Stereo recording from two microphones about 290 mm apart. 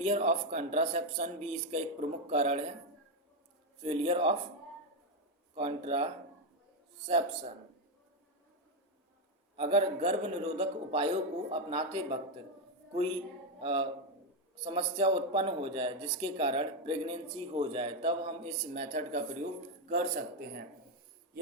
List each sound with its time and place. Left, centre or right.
0.0 s a man's voice: right
3.8 s a man's voice: centre
5.5 s a man's voice: centre
9.6 s a man's voice: centre
13.6 s speech: centre